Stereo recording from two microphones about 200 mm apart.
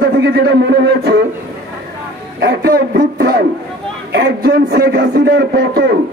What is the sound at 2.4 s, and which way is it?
A man's voice, 50° right (ahead or behind).